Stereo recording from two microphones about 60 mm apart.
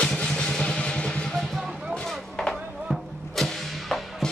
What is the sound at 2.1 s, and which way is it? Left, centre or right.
Vehicle, centre.